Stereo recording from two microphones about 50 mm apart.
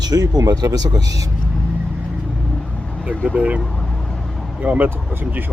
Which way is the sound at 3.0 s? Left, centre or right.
Right.